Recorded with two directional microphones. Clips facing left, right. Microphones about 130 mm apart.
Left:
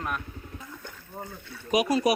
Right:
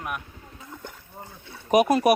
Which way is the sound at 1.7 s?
55° right (ahead or behind).